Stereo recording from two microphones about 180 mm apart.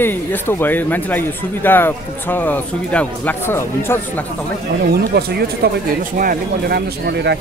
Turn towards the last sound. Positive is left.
turn(degrees=-70)  # may be behind; listen again after turning